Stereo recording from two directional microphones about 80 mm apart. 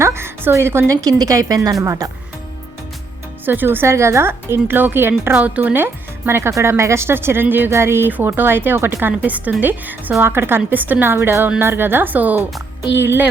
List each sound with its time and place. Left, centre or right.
0.0 s a woman's voice: right
1.0 s a woman's voice: right
3.4 s a woman's voice: right
13.0 s music: right